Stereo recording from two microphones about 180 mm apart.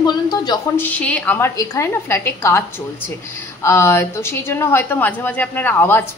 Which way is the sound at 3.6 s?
15° left (ahead or behind).